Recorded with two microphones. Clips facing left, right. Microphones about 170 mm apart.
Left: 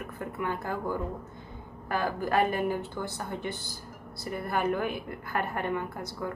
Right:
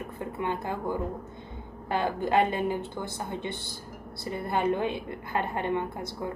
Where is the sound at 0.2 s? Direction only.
20° right (ahead or behind).